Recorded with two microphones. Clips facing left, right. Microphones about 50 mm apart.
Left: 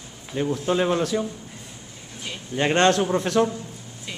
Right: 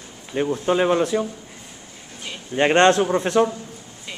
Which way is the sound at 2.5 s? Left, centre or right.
Right.